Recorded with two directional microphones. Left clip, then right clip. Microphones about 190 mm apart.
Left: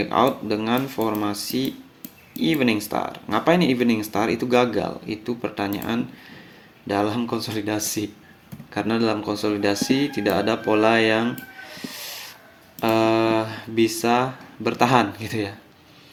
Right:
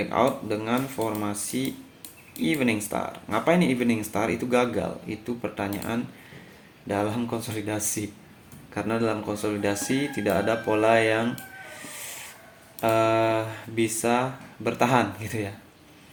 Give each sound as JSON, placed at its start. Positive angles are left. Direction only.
{"t": 0.0, "sound": "speech", "side_deg": 50}
{"t": 12.0, "sound": "hiss", "side_deg": 40}
{"t": 12.8, "sound": "speech", "side_deg": 50}